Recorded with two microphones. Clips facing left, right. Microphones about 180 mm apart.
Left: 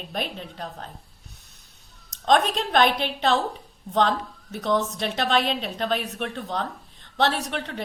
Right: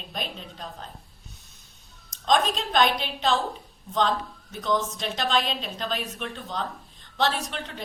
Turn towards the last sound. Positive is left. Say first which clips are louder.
# left 4 dB
turn(degrees=65)  # may be behind; listen again after turning